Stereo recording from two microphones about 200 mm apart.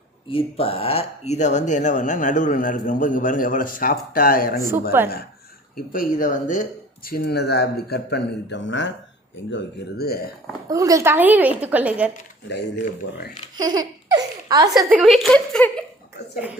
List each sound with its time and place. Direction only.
0.3 s speech: 30° left (ahead or behind); by 4.6 s 45° left (ahead or behind)
4.7 s a woman's voice: 10° right (ahead or behind)
5.7 s speech: 45° left (ahead or behind)
10.7 s a woman's voice: 15° right (ahead or behind)
12.5 s speech: 60° left (ahead or behind)
13.6 s baby laughter: 20° right (ahead or behind)
14.8 s a woman's voice: 5° right (ahead or behind)